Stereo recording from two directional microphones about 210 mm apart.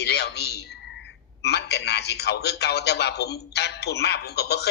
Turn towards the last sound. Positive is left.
turn(degrees=50)  # may be behind; listen again after turning